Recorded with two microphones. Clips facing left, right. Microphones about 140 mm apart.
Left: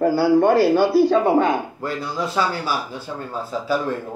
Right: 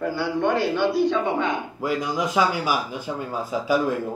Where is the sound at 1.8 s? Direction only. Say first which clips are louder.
Right 1 dB; 10° right (ahead or behind).